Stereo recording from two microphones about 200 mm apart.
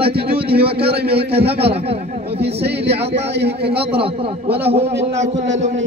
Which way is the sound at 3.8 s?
30° right (ahead or behind).